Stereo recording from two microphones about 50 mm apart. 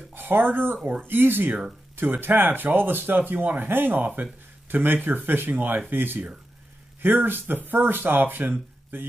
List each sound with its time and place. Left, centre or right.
0.1 s speech: right